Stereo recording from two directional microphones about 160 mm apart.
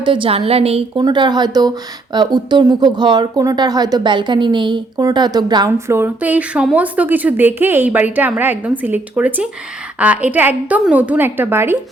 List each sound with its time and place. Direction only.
0.0 s a woman's voice: 30° right (ahead or behind)
1.0 s a woman's voice: 25° right (ahead or behind)